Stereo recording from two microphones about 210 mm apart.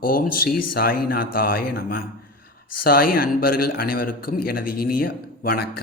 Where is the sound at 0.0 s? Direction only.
45° left (ahead or behind).